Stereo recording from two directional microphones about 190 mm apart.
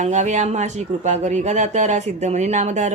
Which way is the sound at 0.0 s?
40° right (ahead or behind).